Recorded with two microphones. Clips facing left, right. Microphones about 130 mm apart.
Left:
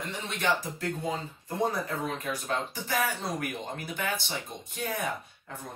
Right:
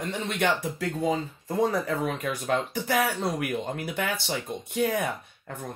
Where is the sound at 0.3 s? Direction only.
70° right (ahead or behind).